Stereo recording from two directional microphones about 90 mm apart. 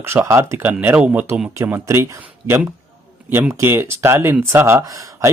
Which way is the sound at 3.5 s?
25° right (ahead or behind).